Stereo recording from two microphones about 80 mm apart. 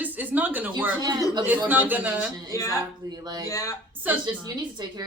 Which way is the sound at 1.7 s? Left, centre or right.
Right.